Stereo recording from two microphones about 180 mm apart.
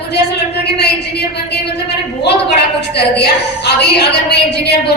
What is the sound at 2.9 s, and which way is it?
A woman's voice, 65° left (ahead or behind).